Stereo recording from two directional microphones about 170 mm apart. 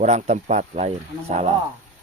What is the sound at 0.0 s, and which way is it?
Speech, 40° right (ahead or behind).